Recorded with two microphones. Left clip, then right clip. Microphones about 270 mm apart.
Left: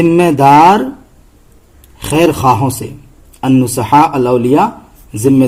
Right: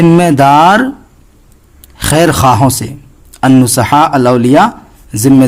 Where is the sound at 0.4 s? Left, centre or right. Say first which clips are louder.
Left 1 dB; right.